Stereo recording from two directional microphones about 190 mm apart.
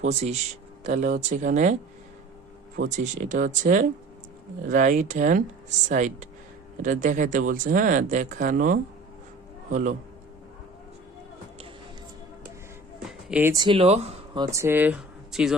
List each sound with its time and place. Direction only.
0.0 s speech: 35° right (ahead or behind)
2.9 s a man's voice: 40° right (ahead or behind)
13.3 s speech: 15° right (ahead or behind); by 14.4 s 30° right (ahead or behind)
14.5 s speech: 10° right (ahead or behind)